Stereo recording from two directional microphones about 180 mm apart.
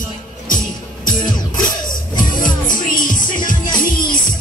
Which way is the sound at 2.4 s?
50° left (ahead or behind).